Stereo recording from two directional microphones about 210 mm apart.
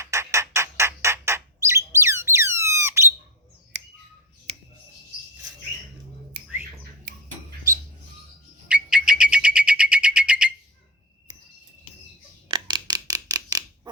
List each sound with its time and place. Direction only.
0.0 s squawk: 15° right (ahead or behind)
3.7 s bird: 60° right (ahead or behind)
8.6 s bird: 5° right (ahead or behind)
12.5 s a sound: 25° right (ahead or behind)